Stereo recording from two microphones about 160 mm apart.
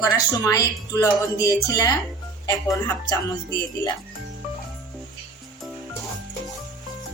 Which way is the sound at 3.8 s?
25° left (ahead or behind).